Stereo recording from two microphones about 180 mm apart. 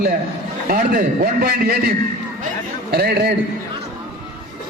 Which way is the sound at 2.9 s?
60° right (ahead or behind).